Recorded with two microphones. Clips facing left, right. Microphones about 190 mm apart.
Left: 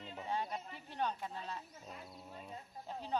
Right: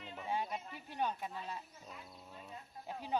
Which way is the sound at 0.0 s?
30° left (ahead or behind).